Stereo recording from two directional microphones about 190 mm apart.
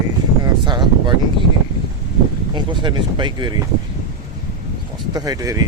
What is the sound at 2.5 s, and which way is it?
Speech, 25° right (ahead or behind).